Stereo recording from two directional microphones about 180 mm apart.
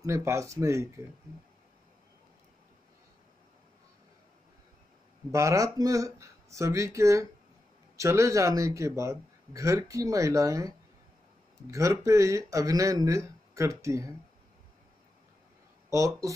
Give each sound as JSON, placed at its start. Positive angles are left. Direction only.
{"t": 0.0, "sound": "a man's voice", "side_deg": -15}
{"t": 5.3, "sound": "a man's voice", "side_deg": -15}
{"t": 11.7, "sound": "a man's voice", "side_deg": -15}
{"t": 15.9, "sound": "a man's voice", "side_deg": -15}